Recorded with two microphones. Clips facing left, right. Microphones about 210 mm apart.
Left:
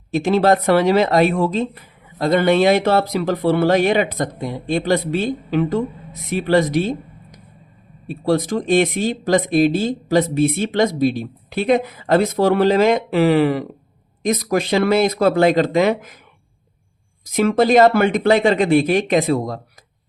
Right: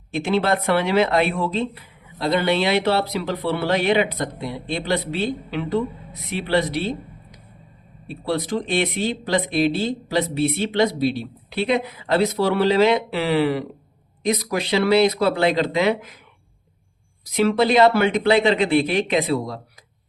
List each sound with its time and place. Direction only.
0.1 s a woman's voice: 40° left (ahead or behind)
17.2 s a woman's voice: 45° left (ahead or behind)